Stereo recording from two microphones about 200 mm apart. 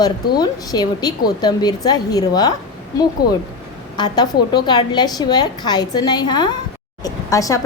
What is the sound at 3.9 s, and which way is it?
A woman's voice, 20° left (ahead or behind).